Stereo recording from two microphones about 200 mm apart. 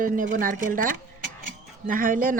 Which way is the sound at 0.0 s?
40° right (ahead or behind).